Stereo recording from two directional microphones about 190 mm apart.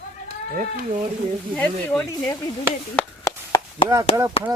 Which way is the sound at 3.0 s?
15° left (ahead or behind).